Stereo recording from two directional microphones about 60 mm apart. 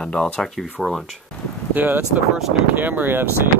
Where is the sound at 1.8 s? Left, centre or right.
Right.